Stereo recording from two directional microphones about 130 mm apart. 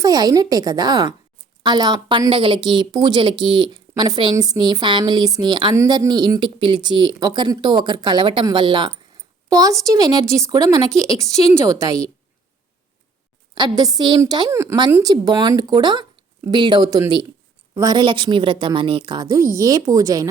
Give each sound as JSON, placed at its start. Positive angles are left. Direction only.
{"t": 0.0, "sound": "a woman's voice", "side_deg": -30}
{"t": 5.7, "sound": "a woman's voice", "side_deg": -25}
{"t": 13.6, "sound": "a woman's voice", "side_deg": -30}
{"t": 15.1, "sound": "a woman's voice", "side_deg": -30}